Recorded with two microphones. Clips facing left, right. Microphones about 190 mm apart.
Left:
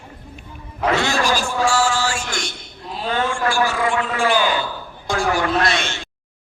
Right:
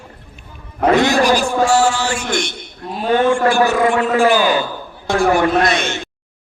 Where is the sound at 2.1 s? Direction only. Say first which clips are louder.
Right 6 dB; 20° right (ahead or behind).